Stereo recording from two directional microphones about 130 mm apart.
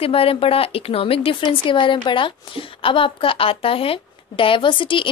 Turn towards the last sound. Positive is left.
turn(degrees=40)  # may be behind; listen again after turning